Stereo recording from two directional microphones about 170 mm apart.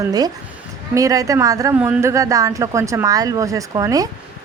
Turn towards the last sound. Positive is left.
turn(degrees=-20)  # may be behind; listen again after turning